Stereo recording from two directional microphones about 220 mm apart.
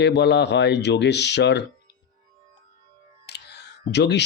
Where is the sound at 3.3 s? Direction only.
50° left (ahead or behind).